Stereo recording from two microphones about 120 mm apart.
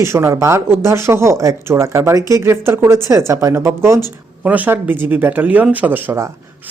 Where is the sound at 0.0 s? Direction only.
25° right (ahead or behind).